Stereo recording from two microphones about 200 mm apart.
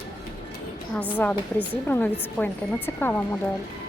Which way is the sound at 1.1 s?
10° left (ahead or behind).